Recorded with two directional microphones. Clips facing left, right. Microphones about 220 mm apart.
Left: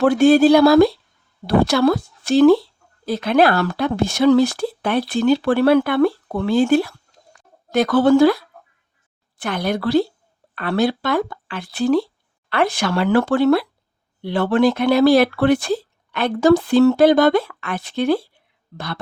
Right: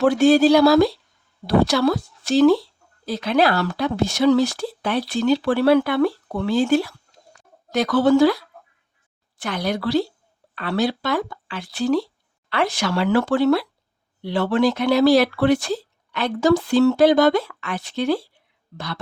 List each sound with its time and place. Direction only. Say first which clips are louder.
0.0 s speech: left 2 dB; 55° left (ahead or behind)